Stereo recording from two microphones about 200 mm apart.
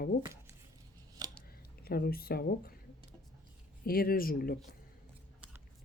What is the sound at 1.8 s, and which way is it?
Speech, 50° left (ahead or behind).